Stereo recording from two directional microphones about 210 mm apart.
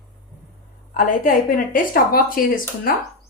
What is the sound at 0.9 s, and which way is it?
A woman's voice, 40° left (ahead or behind).